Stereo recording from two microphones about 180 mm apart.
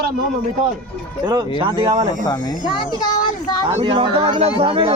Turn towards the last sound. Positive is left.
turn(degrees=-30)  # may be behind; listen again after turning